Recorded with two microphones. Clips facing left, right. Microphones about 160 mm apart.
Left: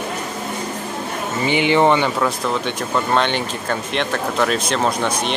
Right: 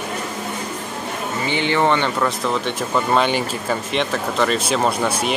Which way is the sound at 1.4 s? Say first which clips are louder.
Left 4 dB; 15° left (ahead or behind).